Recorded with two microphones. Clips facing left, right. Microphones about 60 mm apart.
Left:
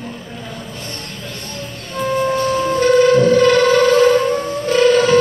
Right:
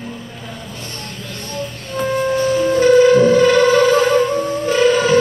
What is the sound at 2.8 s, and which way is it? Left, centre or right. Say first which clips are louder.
Music: right 1 dB; centre.